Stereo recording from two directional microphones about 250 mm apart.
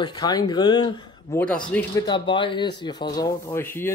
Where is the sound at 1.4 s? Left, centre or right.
Centre.